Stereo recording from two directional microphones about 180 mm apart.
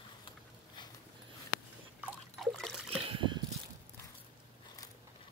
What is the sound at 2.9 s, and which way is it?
Boat, 30° right (ahead or behind).